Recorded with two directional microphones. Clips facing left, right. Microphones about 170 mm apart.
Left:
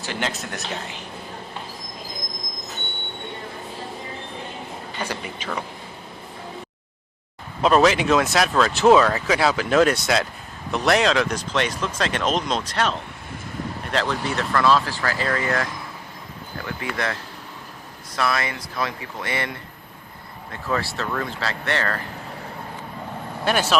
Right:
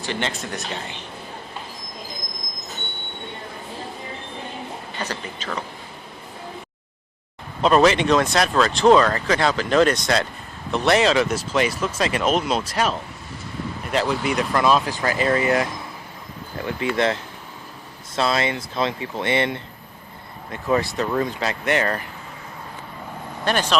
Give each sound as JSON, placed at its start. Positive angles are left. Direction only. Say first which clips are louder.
{"t": 0.0, "sound": "speech", "louder": "right 1 dB", "side_deg": 5}
{"t": 4.9, "sound": "speech", "louder": "left 1 dB", "side_deg": 10}
{"t": 7.6, "sound": "speech", "louder": "right 1 dB", "side_deg": 0}
{"t": 18.2, "sound": "speech", "louder": "right 3 dB", "side_deg": -25}
{"t": 23.5, "sound": "speech", "louder": "even", "side_deg": 5}